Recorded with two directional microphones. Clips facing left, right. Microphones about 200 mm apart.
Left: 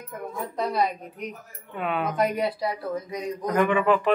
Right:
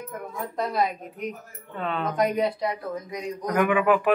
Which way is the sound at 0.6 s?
Centre (ahead or behind).